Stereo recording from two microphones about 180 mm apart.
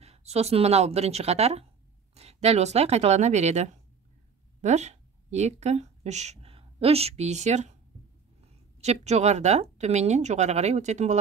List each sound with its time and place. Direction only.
0.0 s a woman's voice: 35° right (ahead or behind)
8.8 s speech: 40° right (ahead or behind)